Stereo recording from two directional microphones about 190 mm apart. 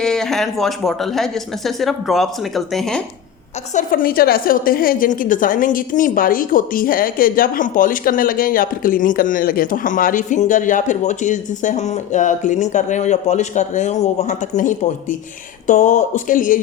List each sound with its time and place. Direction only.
0.0 s speech: 5° left (ahead or behind)
3.8 s a woman's voice: 50° left (ahead or behind)